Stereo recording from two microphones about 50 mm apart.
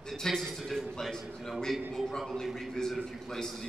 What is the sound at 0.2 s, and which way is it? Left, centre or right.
A man's voice, centre.